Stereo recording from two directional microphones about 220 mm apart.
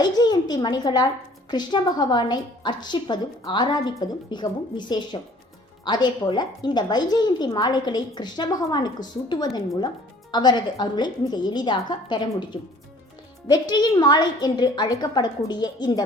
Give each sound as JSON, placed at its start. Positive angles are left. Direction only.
{"t": 0.0, "sound": "a woman's voice", "side_deg": 20}